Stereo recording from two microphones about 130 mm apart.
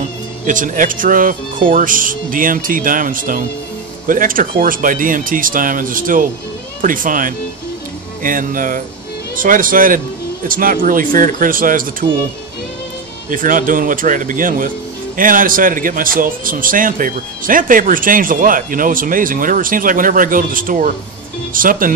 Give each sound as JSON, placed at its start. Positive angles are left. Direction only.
{"t": 0.5, "sound": "a man's voice", "side_deg": -90}
{"t": 13.3, "sound": "a man's voice", "side_deg": -90}